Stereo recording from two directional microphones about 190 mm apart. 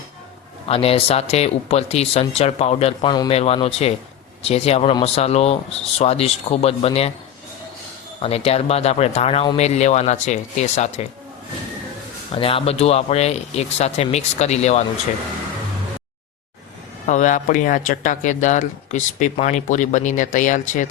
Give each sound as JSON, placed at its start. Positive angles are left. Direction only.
{"t": 0.7, "sound": "speech", "side_deg": 30}
{"t": 8.2, "sound": "speech", "side_deg": 30}
{"t": 12.3, "sound": "speech", "side_deg": 30}
{"t": 17.1, "sound": "speech", "side_deg": 40}